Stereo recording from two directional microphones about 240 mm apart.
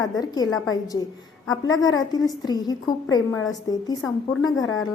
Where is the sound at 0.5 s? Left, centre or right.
Left.